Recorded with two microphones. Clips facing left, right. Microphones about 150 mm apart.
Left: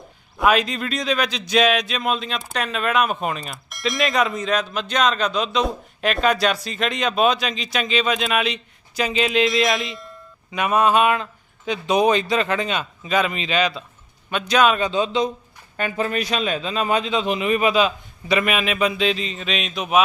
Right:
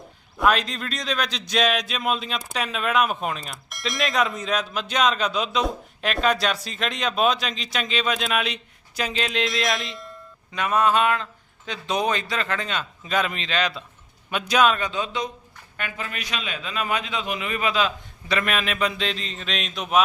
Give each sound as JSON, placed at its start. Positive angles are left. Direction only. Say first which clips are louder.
{"t": 0.3, "sound": "speech", "louder": "left 3 dB", "side_deg": 5}
{"t": 10.5, "sound": "speech", "louder": "left 3 dB", "side_deg": 15}
{"t": 13.1, "sound": "a man's voice", "louder": "left 4 dB", "side_deg": 0}
{"t": 14.8, "sound": "a man's voice", "louder": "left 7 dB", "side_deg": 25}
{"t": 15.8, "sound": "a man's voice", "louder": "left 10 dB", "side_deg": 35}